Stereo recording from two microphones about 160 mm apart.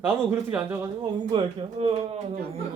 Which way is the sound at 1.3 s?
35° right (ahead or behind).